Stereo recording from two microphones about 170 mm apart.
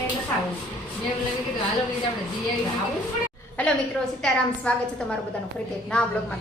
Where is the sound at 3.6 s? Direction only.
10° left (ahead or behind).